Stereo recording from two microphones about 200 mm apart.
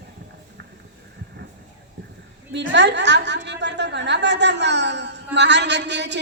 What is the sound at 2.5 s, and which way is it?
A woman's voice, 60° right (ahead or behind).